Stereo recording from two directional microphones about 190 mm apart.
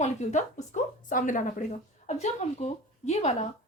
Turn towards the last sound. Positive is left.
turn(degrees=35)  # may be behind; listen again after turning